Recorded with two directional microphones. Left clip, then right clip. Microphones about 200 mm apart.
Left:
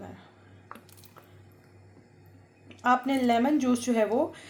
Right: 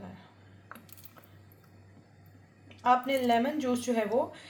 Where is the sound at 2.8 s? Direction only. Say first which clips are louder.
Left 1 dB; 45° left (ahead or behind).